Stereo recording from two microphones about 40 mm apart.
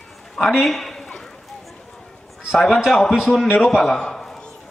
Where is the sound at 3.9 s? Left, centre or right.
Centre.